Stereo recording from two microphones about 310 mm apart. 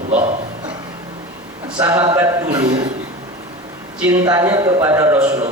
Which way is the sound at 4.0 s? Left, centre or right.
Centre.